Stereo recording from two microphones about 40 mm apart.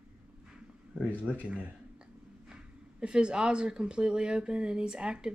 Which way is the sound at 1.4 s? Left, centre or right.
Right.